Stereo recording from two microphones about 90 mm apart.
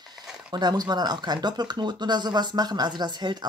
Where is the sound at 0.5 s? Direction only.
50° right (ahead or behind).